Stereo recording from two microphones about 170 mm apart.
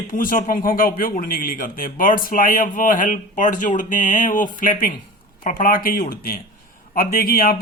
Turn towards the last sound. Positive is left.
turn(degrees=60)  # may be behind; listen again after turning